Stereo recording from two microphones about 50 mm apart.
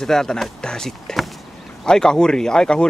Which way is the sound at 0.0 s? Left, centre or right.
Centre.